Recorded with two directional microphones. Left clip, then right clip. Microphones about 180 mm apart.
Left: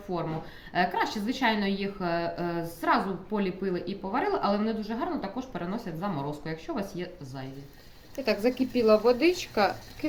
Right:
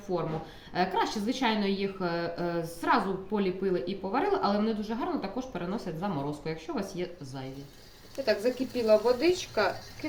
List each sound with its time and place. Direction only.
0.7 s a woman's voice: 15° left (ahead or behind)
8.2 s speech: 60° left (ahead or behind)